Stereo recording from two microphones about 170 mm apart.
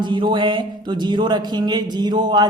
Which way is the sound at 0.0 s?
25° right (ahead or behind).